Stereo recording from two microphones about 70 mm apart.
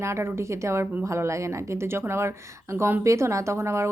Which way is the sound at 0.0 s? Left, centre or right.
Right.